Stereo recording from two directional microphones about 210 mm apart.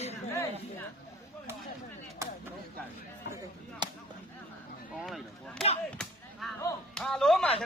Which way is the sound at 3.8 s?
20° right (ahead or behind).